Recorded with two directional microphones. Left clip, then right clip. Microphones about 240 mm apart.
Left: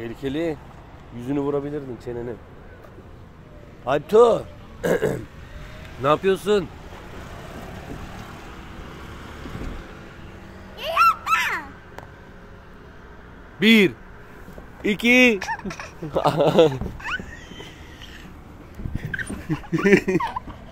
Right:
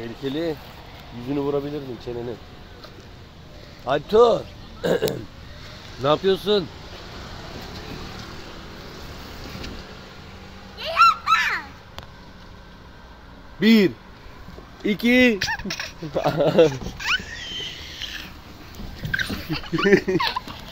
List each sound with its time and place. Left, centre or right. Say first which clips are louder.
0.0 s speech: left 1 dB; centre
3.8 s speech: left 1 dB; centre
6.0 s speech: even; centre
10.8 s a sound: right 1 dB; left
13.6 s speech: left 2 dB; centre
16.1 s speech: left 2 dB; centre
19.1 s speech: right 4 dB; centre